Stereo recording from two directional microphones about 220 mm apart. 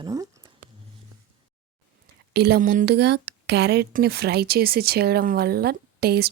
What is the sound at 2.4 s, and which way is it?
Speech, 45° right (ahead or behind).